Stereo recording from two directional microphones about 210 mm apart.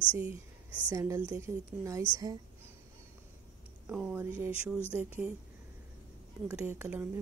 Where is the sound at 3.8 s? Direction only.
5° right (ahead or behind).